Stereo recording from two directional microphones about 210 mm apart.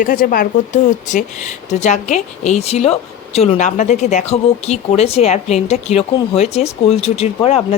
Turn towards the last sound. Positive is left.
turn(degrees=30)  # may be behind; listen again after turning